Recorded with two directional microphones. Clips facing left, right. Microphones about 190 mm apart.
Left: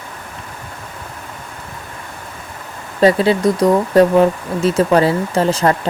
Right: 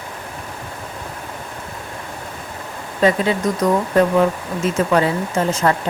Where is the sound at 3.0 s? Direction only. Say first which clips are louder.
Left 4 dB; 35° left (ahead or behind).